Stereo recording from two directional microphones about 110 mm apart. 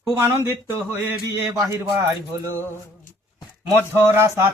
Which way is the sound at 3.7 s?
20° right (ahead or behind).